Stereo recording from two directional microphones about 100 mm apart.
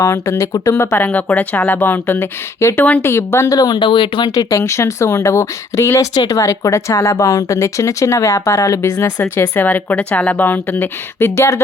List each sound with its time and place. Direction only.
0.0 s speech: 30° left (ahead or behind)
3.6 s speech: 45° left (ahead or behind)
4.4 s speech: 30° left (ahead or behind)